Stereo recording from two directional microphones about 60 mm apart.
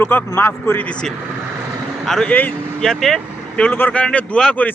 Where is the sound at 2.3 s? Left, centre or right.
Left.